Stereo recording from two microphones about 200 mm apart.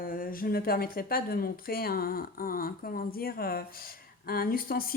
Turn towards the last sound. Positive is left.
turn(degrees=45)  # may be behind; listen again after turning